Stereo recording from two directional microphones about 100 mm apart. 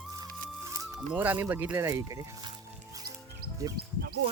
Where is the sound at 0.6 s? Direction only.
30° right (ahead or behind).